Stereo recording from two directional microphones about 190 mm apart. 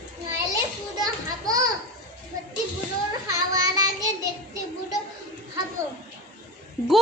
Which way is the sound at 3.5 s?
20° right (ahead or behind).